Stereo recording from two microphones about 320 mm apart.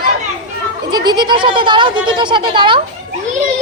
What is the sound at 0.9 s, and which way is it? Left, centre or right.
Speech, centre.